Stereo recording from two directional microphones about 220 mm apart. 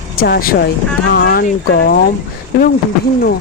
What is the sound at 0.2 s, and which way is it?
A woman's voice, 40° left (ahead or behind).